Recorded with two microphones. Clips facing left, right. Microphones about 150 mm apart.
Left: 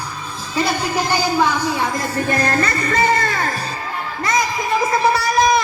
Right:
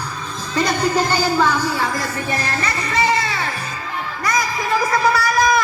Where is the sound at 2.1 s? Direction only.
50° left (ahead or behind).